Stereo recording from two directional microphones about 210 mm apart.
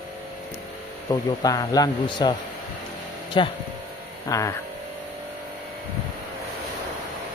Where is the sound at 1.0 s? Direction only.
15° left (ahead or behind).